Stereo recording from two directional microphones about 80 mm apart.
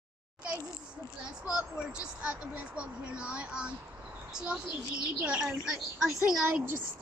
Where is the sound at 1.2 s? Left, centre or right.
Centre.